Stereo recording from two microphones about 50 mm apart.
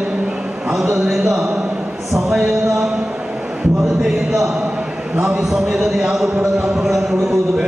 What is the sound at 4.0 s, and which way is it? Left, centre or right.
Chant, centre.